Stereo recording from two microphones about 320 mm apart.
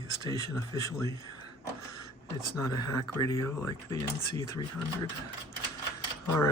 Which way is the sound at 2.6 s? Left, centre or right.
Centre.